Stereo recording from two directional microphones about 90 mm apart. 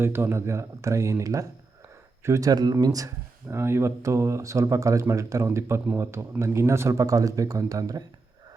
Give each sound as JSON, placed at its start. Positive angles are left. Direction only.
{"t": 0.0, "sound": "speech", "side_deg": -25}
{"t": 3.5, "sound": "a man's voice", "side_deg": -30}